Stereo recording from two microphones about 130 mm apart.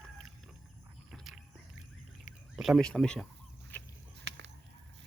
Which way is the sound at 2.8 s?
5° left (ahead or behind).